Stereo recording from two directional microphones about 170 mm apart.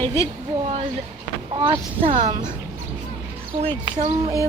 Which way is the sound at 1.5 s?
30° right (ahead or behind).